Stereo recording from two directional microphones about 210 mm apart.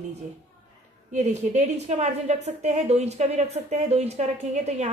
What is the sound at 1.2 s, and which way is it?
A woman's voice, 30° right (ahead or behind).